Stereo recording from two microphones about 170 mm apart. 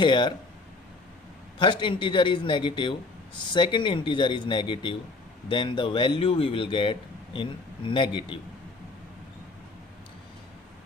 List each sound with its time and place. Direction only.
0.0 s speech: 25° left (ahead or behind)
1.5 s speech: 30° left (ahead or behind)